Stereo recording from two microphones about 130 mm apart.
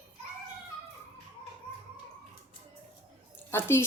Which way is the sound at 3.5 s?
20° left (ahead or behind).